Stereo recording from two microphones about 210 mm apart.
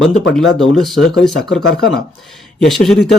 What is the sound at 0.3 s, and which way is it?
Speech, centre (ahead or behind).